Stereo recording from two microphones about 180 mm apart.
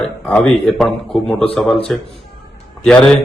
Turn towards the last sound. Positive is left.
turn(degrees=5)  # may be behind; listen again after turning